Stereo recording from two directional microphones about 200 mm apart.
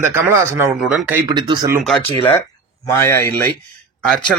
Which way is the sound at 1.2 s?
20° right (ahead or behind).